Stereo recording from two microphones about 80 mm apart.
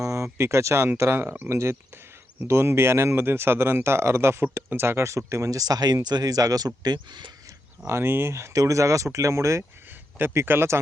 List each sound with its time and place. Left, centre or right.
0.0 s a sound: right
0.9 s speech: right
7.9 s speech: right